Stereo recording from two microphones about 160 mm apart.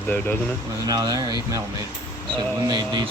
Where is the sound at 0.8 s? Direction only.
25° right (ahead or behind).